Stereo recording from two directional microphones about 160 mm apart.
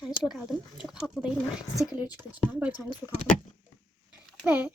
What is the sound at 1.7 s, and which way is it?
Speech, 20° left (ahead or behind).